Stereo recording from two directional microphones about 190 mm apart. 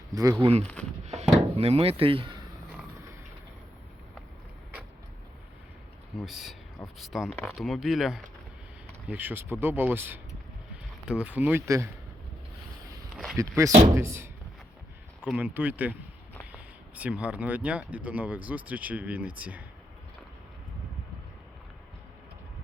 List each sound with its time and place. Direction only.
0.1 s speech: 15° right (ahead or behind)
0.6 s speech: 5° left (ahead or behind)
1.0 s wood: 35° right (ahead or behind)
6.1 s speech: centre (ahead or behind)
13.3 s speech: 15° right (ahead or behind)